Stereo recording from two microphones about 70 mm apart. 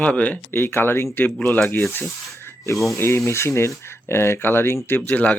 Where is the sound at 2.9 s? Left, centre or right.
Left.